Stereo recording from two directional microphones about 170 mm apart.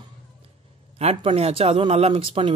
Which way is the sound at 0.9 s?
35° right (ahead or behind).